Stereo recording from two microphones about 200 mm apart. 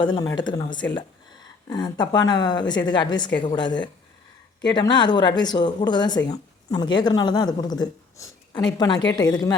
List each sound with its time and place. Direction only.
0.0 s speech: 20° left (ahead or behind)